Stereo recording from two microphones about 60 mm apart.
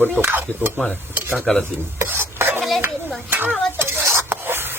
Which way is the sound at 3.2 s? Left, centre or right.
Right.